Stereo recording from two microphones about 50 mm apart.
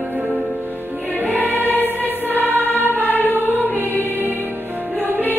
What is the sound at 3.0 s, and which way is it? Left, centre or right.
Music, left.